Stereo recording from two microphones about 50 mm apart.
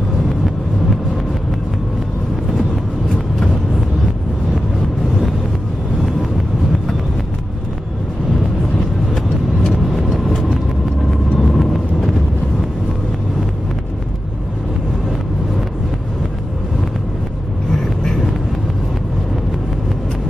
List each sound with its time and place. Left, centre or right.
9.7 s vehicle: centre
17.6 s vehicle: centre